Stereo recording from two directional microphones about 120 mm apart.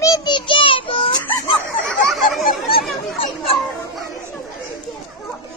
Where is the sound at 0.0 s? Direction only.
30° left (ahead or behind).